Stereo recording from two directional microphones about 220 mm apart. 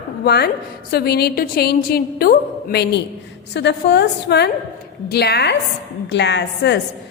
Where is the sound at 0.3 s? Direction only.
45° left (ahead or behind).